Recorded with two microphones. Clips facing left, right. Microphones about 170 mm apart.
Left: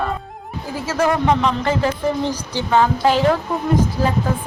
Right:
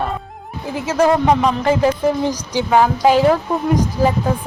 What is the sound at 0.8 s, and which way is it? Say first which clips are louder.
Speech: right 3 dB; 20° right (ahead or behind).